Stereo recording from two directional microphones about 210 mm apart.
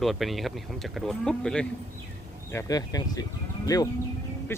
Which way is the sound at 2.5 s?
15° left (ahead or behind).